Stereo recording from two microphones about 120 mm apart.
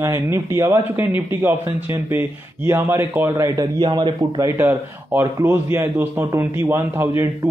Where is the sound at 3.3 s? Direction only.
30° right (ahead or behind).